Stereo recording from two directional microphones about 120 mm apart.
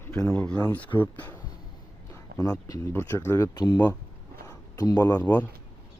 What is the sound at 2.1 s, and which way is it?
Speech, 30° left (ahead or behind).